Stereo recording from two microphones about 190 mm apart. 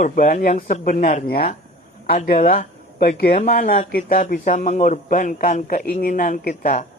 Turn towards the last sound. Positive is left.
turn(degrees=40)  # may be behind; listen again after turning